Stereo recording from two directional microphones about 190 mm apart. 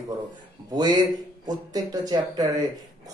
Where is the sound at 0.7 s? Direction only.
20° right (ahead or behind).